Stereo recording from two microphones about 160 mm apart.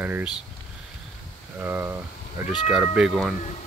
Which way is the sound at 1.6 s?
15° right (ahead or behind).